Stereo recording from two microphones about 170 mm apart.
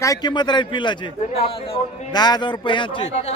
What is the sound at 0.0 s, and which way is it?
A man's voice, 20° left (ahead or behind).